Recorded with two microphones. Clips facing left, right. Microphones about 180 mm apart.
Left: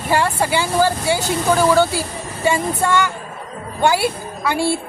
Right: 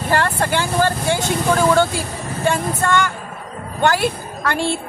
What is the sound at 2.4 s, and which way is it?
A man's voice, 10° left (ahead or behind).